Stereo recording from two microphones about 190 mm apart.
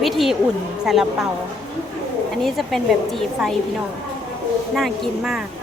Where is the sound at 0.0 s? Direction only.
Centre (ahead or behind).